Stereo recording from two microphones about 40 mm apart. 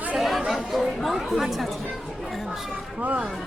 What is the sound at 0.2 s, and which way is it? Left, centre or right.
Chatter, centre.